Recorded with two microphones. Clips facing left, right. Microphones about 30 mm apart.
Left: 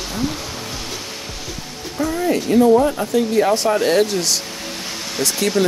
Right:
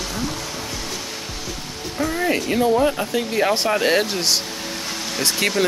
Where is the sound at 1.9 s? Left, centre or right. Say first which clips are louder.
Left 2 dB; centre.